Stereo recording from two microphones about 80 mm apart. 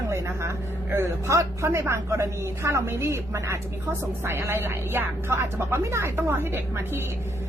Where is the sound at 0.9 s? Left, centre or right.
Right.